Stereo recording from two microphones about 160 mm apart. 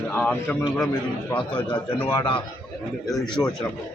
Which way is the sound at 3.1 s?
Centre (ahead or behind).